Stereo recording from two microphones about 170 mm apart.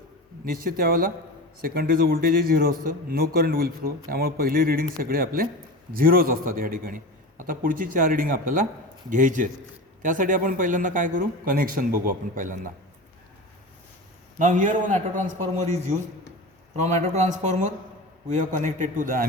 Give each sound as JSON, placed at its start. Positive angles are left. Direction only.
{"t": 0.4, "sound": "a man's voice", "side_deg": -60}
{"t": 14.3, "sound": "speech", "side_deg": -45}